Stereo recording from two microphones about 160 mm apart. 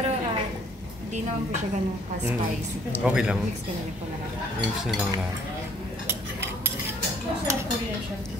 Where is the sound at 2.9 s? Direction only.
10° right (ahead or behind).